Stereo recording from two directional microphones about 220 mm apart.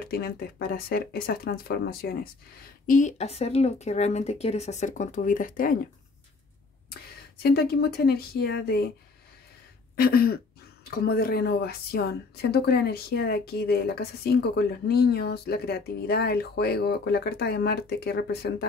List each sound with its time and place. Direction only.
0.0 s a woman's voice: 45° left (ahead or behind)
2.9 s speech: 35° left (ahead or behind)
7.4 s a woman's voice: 45° left (ahead or behind)
9.9 s a woman's voice: 45° left (ahead or behind)